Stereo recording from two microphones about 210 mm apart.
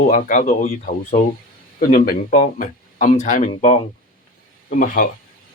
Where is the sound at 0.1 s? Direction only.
35° left (ahead or behind).